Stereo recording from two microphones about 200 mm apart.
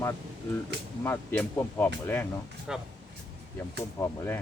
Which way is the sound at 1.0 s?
10° left (ahead or behind).